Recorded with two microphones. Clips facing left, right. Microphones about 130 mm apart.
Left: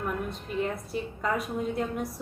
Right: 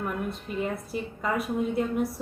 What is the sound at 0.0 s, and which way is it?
A woman's voice, centre (ahead or behind).